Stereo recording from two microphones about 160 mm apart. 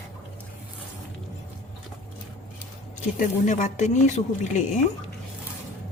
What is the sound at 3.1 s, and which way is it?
Speech, 50° left (ahead or behind).